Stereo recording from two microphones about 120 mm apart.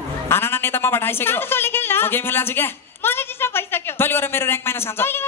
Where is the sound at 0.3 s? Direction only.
20° left (ahead or behind).